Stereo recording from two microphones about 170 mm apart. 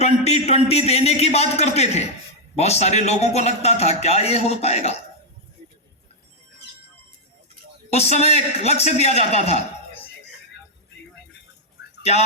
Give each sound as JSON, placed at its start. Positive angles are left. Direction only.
{"t": 0.0, "sound": "a man's voice", "side_deg": 40}
{"t": 7.9, "sound": "a man's voice", "side_deg": 40}